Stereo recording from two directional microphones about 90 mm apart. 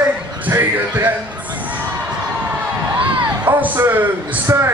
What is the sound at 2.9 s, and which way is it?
A man's voice, 20° right (ahead or behind).